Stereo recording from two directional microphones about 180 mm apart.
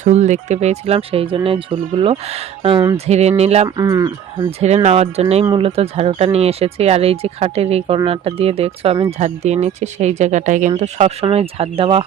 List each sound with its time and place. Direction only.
0.0 s speech: 40° right (ahead or behind)
3.8 s speech: 20° right (ahead or behind)
4.4 s speech: 35° right (ahead or behind)